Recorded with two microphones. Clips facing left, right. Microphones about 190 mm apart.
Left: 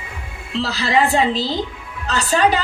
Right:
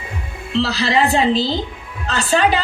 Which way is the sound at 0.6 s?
50° left (ahead or behind).